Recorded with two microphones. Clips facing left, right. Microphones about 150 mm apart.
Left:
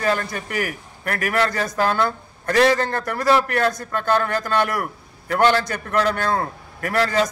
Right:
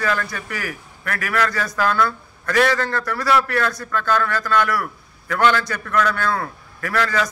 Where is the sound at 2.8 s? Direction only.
45° left (ahead or behind).